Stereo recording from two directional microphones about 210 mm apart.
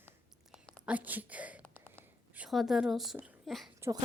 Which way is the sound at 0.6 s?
5° left (ahead or behind).